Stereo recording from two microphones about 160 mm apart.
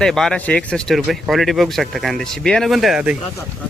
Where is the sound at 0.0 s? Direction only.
5° left (ahead or behind).